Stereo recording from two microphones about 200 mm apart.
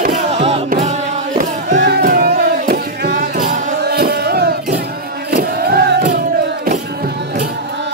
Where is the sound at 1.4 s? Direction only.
40° right (ahead or behind).